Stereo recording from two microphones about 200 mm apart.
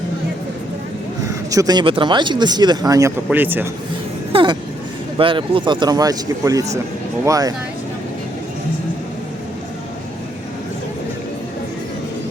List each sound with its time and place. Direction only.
1.5 s a man's voice: 20° right (ahead or behind)
4.3 s vehicle: 25° right (ahead or behind)
5.1 s a man's voice: 25° right (ahead or behind)